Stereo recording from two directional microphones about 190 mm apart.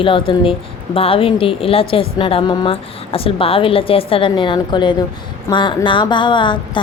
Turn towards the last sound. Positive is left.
turn(degrees=25)  # may be behind; listen again after turning